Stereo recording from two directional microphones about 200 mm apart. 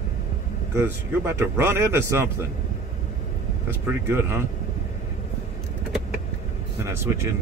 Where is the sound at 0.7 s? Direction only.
10° right (ahead or behind).